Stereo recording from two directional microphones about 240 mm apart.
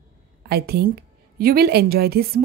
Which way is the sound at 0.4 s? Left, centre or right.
Right.